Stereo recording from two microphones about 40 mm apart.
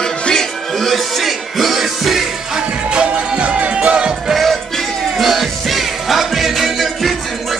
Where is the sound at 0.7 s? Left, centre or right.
Centre.